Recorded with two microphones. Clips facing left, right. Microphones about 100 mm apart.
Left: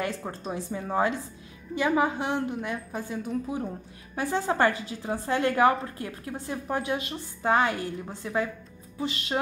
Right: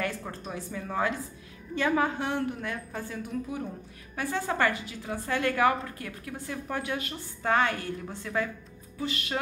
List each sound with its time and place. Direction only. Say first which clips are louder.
0.0 s a woman's voice: left 2 dB; 25° left (ahead or behind)